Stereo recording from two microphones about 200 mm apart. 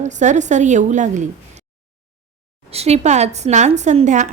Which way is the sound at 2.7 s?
30° right (ahead or behind).